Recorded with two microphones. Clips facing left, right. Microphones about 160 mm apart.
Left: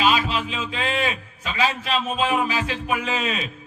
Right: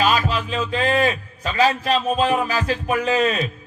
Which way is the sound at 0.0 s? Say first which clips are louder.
Right 1 dB; 40° right (ahead or behind).